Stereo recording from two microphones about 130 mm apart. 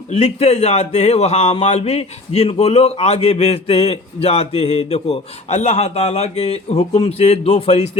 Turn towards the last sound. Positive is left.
turn(degrees=55)  # may be behind; listen again after turning